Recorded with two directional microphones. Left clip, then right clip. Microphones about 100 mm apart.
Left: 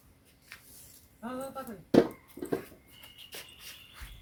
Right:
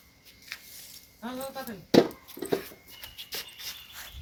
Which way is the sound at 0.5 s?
30° right (ahead or behind).